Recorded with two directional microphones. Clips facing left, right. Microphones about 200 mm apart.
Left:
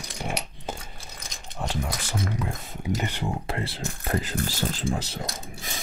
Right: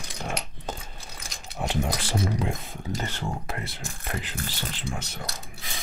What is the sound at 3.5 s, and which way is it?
Speech, 30° left (ahead or behind).